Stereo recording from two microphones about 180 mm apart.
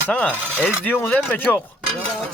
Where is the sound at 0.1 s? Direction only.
10° left (ahead or behind).